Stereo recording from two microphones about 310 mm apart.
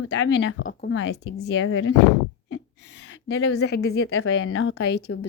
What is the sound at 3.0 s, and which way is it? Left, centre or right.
Speech, left.